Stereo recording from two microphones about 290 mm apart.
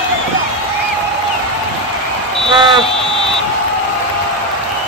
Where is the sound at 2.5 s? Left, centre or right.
Centre.